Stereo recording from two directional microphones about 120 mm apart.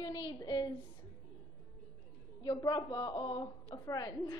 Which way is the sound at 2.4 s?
35° left (ahead or behind).